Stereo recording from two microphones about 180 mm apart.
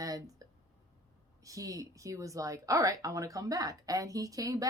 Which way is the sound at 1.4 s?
20° right (ahead or behind).